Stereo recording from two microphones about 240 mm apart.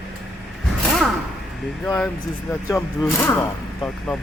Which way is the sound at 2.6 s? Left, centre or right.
Centre.